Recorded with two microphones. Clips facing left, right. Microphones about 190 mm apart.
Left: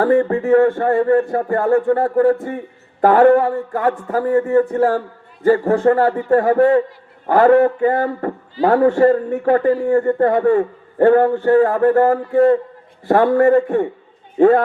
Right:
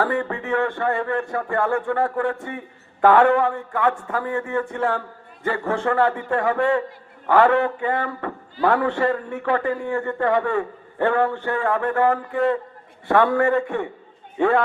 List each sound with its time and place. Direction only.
0.0 s a man's voice: 35° left (ahead or behind)